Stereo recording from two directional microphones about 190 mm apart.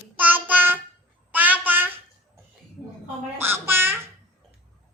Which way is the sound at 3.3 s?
10° right (ahead or behind).